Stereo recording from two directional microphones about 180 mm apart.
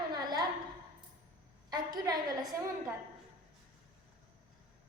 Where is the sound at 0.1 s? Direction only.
25° right (ahead or behind).